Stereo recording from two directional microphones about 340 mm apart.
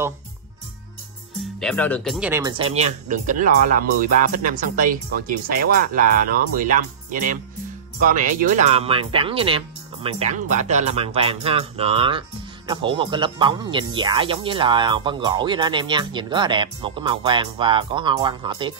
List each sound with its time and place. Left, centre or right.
1.6 s speech: centre